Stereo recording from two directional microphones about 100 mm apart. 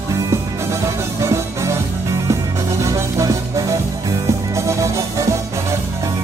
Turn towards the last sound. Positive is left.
turn(degrees=-30)  # may be behind; listen again after turning